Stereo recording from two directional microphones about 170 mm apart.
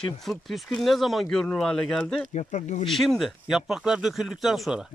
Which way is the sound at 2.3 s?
45° left (ahead or behind).